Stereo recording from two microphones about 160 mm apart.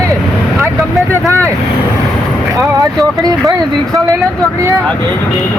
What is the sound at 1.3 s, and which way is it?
Speech, 20° right (ahead or behind).